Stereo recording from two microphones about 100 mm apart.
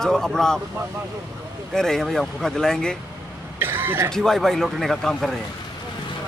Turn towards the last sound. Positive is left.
turn(degrees=0)  # may be behind; listen again after turning